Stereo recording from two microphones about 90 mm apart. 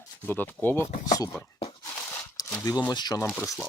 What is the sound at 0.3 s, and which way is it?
Speech, 20° left (ahead or behind).